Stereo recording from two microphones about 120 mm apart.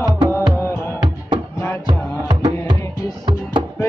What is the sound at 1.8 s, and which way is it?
Music, 45° right (ahead or behind).